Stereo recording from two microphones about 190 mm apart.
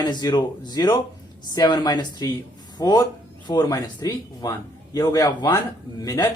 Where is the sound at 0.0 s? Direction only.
20° left (ahead or behind).